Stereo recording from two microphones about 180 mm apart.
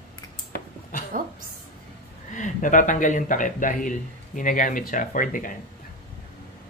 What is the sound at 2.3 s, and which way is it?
Speech, 45° left (ahead or behind).